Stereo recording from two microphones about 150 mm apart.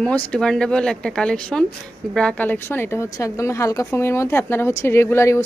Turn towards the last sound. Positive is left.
turn(degrees=20)  # may be behind; listen again after turning